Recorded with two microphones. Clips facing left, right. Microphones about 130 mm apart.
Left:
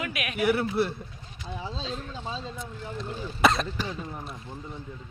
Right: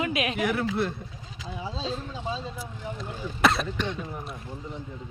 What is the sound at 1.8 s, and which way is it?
Speech, 15° right (ahead or behind).